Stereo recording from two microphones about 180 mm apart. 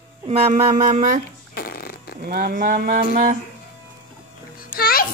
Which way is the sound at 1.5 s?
55° left (ahead or behind).